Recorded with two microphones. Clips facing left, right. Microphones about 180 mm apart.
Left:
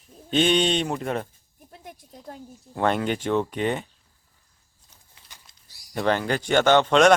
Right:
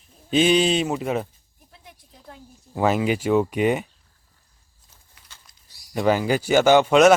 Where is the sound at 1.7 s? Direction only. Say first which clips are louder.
Left 6 dB; 45° left (ahead or behind).